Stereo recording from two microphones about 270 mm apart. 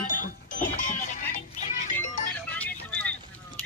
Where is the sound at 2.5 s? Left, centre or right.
Centre.